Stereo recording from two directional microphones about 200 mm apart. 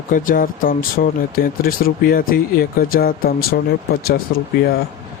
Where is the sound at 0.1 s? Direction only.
45° left (ahead or behind).